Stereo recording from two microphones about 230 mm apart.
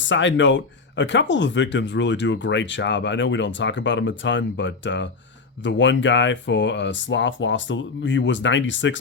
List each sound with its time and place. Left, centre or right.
0.0 s speech: left